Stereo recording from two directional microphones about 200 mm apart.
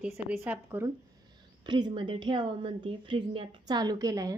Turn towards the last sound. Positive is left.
turn(degrees=-15)  # may be behind; listen again after turning